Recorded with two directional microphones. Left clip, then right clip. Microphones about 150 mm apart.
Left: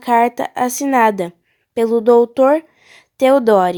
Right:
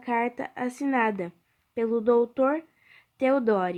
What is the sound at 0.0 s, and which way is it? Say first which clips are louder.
A woman's voice: left 14 dB; 45° left (ahead or behind).